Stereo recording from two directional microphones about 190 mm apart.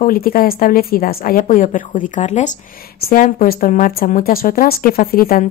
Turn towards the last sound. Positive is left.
turn(degrees=50)  # may be behind; listen again after turning